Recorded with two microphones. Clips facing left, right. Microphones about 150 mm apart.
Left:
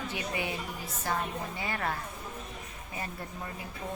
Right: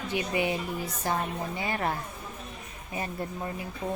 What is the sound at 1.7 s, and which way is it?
Speech, 25° right (ahead or behind).